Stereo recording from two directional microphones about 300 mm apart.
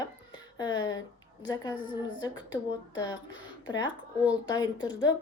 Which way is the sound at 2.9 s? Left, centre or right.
Centre.